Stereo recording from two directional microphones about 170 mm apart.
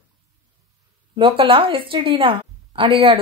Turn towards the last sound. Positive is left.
turn(degrees=-30)  # may be behind; listen again after turning